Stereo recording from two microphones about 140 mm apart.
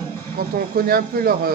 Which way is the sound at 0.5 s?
90° right.